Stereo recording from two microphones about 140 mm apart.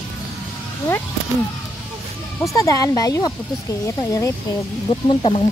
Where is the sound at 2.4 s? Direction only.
25° left (ahead or behind).